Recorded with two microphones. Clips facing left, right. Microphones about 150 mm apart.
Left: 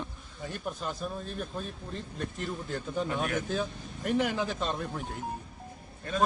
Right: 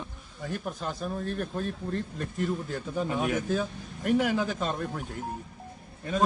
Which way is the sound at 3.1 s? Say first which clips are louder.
Right 5 dB; 15° right (ahead or behind).